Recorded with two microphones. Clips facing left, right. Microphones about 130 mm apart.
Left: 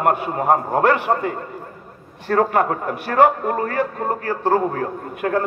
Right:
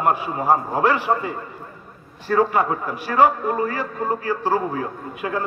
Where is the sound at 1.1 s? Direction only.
50° left (ahead or behind).